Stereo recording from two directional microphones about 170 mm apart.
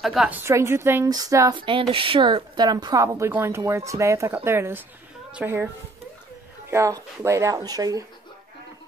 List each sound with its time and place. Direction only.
0.0 s a woman's voice: centre (ahead or behind)
0.4 s a woman's voice: 15° right (ahead or behind)
1.6 s a woman's voice: 30° right (ahead or behind); by 5.7 s 10° right (ahead or behind)
6.7 s a woman's voice: 15° right (ahead or behind)